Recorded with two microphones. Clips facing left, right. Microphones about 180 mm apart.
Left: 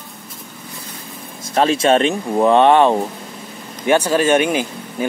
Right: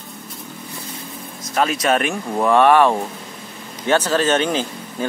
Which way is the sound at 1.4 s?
30° left (ahead or behind).